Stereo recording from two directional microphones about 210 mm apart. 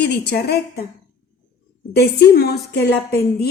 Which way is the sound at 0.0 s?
50° left (ahead or behind).